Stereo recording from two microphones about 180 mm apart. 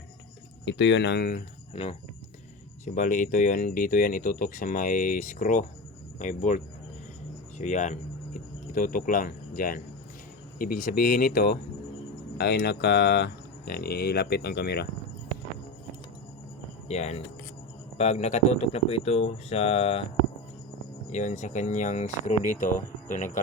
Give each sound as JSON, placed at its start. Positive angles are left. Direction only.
{"t": 0.6, "sound": "speech", "side_deg": 90}
{"t": 1.7, "sound": "speech", "side_deg": 35}
{"t": 2.8, "sound": "speech", "side_deg": 45}
{"t": 7.6, "sound": "speech", "side_deg": 40}
{"t": 16.9, "sound": "speech", "side_deg": 40}
{"t": 21.1, "sound": "speech", "side_deg": 40}